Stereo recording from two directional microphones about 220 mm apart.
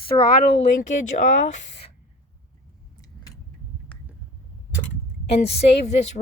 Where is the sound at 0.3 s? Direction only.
40° left (ahead or behind).